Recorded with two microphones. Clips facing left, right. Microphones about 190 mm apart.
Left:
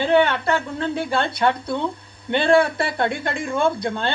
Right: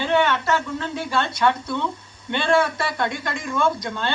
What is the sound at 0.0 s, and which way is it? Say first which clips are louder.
Speech: left 3 dB; 55° left (ahead or behind).